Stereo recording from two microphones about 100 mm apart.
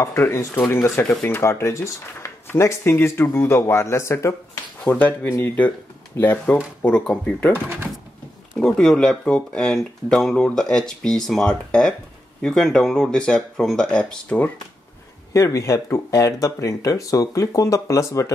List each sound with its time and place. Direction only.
0.0 s speech: 25° left (ahead or behind)
4.8 s speech: 15° left (ahead or behind)
7.5 s speech: 25° right (ahead or behind)
8.5 s speech: 5° left (ahead or behind)
15.3 s speech: 30° left (ahead or behind)